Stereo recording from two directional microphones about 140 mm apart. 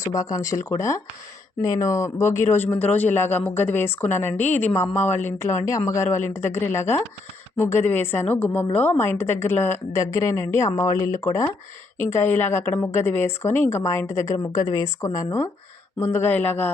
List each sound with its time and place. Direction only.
0.0 s a man's voice: 25° left (ahead or behind)